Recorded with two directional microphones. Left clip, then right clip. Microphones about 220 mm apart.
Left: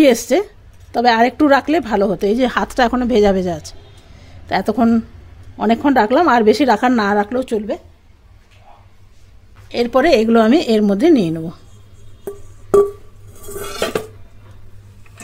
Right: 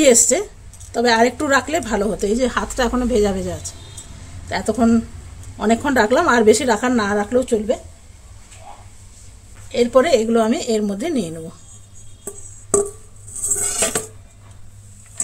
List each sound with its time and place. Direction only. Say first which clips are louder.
0.0 s speech: left 1 dB; 30° left (ahead or behind)
9.7 s speech: left 1 dB; 40° left (ahead or behind)